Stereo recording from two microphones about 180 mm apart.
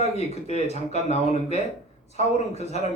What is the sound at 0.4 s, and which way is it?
A man's voice, 35° left (ahead or behind).